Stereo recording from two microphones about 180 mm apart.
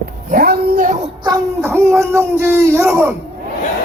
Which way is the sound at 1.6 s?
15° right (ahead or behind).